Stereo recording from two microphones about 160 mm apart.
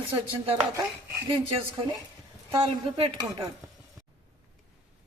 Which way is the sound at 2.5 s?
35° right (ahead or behind).